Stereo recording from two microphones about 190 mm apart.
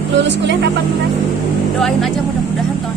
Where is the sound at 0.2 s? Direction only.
70° right (ahead or behind).